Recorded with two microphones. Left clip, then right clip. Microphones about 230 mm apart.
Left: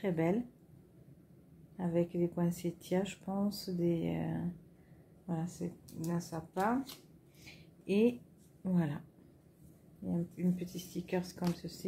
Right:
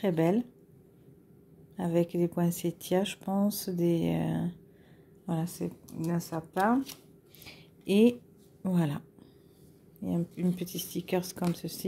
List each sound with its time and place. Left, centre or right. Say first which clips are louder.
0.0 s speech: right 6 dB; right
1.8 s speech: right 5 dB; right
7.4 s a sound: right 6 dB; right
8.6 s speech: right 5 dB; right
10.0 s speech: right 5 dB; right